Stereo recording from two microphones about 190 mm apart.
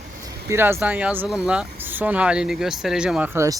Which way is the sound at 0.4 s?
15° right (ahead or behind).